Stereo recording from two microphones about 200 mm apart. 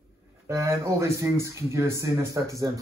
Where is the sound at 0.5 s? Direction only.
15° right (ahead or behind).